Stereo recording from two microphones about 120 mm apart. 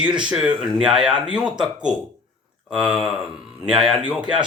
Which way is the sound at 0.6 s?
5° right (ahead or behind).